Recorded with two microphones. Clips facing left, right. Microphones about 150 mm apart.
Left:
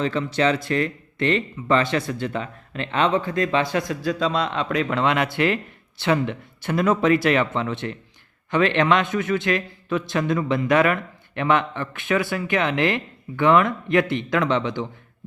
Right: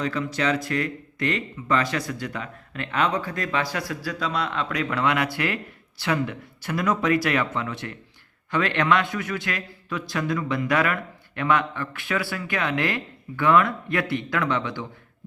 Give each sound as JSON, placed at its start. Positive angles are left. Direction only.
{"t": 0.0, "sound": "a man's voice", "side_deg": 25}